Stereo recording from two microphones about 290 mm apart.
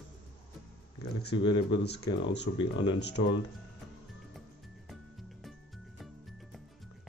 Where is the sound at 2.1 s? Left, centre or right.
Left.